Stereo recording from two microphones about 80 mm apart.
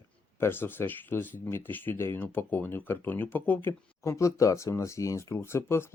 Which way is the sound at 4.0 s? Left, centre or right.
Left.